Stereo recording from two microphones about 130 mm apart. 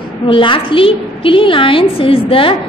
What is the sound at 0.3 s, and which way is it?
A woman's voice, 40° left (ahead or behind).